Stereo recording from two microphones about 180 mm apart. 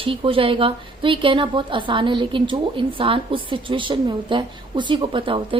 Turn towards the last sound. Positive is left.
turn(degrees=-30)  # may be behind; listen again after turning